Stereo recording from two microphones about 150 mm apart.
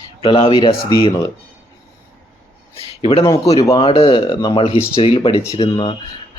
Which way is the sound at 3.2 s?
25° left (ahead or behind).